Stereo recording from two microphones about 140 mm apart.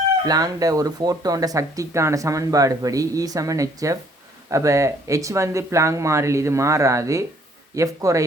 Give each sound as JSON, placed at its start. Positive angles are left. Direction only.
{"t": 0.3, "sound": "speech", "side_deg": -25}